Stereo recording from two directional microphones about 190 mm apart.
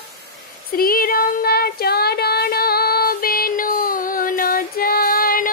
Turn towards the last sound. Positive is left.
turn(degrees=50)  # may be behind; listen again after turning